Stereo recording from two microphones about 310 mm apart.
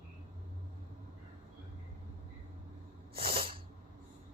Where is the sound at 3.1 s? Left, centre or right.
Centre.